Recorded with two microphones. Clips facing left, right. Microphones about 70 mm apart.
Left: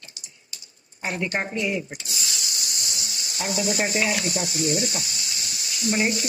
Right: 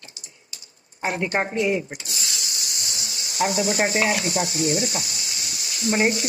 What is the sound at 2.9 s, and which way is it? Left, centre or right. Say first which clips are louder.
Sizzle: right 1 dB; right.